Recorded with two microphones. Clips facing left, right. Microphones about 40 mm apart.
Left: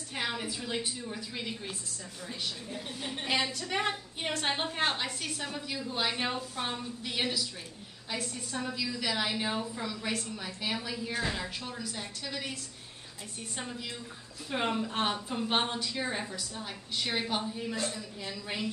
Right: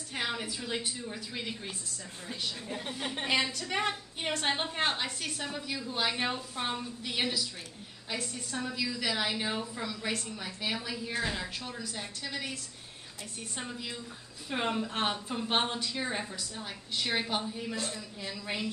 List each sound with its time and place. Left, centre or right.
0.1 s a woman's voice: centre
2.2 s a woman's voice: right
3.3 s a woman's voice: centre
13.6 s a woman's voice: centre